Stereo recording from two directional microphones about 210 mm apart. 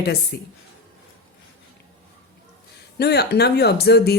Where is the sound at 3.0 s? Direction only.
50° left (ahead or behind).